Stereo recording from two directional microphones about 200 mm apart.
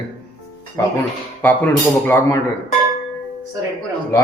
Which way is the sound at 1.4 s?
10° left (ahead or behind).